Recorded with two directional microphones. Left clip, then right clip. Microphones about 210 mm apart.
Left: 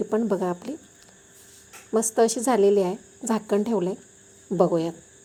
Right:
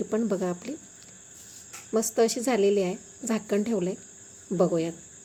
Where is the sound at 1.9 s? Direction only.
10° left (ahead or behind).